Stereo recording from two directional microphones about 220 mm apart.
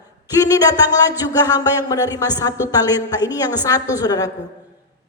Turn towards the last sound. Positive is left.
turn(degrees=15)  # may be behind; listen again after turning